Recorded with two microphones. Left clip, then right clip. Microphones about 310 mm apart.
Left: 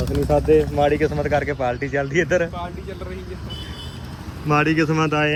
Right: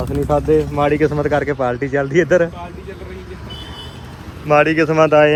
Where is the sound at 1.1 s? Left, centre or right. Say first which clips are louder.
Right 4 dB; right.